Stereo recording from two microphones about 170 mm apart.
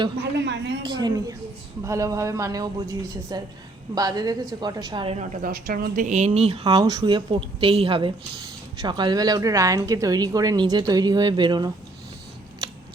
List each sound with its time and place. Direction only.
0.3 s a sound: 90° right
0.8 s speech: 25° right (ahead or behind)
5.1 s a woman's voice: 45° right (ahead or behind)
5.5 s speech: 65° right (ahead or behind)
6.1 s speech: 40° right (ahead or behind)
6.7 s speech: 25° right (ahead or behind)